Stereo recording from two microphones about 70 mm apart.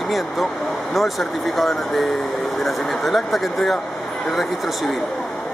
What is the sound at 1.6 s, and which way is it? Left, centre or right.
Speech, centre.